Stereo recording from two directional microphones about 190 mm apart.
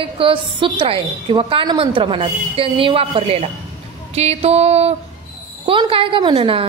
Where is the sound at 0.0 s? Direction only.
25° right (ahead or behind).